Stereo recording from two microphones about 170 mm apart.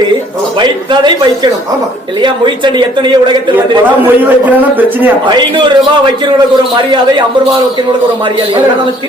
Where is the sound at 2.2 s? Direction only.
25° right (ahead or behind).